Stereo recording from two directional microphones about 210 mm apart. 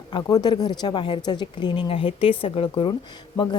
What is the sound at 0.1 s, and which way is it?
A woman's voice, 20° left (ahead or behind).